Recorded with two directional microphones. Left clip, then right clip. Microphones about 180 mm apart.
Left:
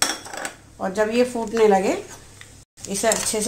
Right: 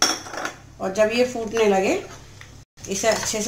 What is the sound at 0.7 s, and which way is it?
Speech, 50° left (ahead or behind).